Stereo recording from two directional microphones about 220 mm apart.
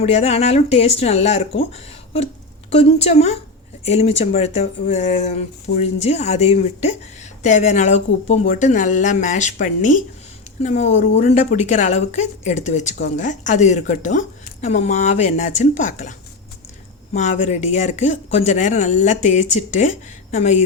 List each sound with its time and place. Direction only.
0.0 s speech: 30° left (ahead or behind)
17.2 s speech: 35° left (ahead or behind)